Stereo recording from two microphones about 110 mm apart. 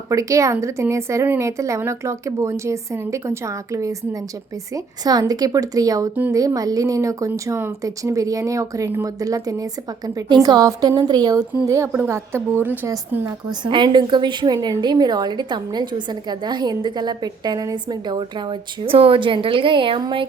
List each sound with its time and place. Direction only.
0.1 s a woman's voice: 30° right (ahead or behind)
13.7 s a woman's voice: 45° right (ahead or behind)
18.8 s a woman's voice: 55° right (ahead or behind)